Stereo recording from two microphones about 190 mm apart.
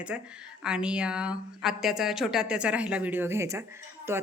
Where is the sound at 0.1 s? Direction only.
5° right (ahead or behind).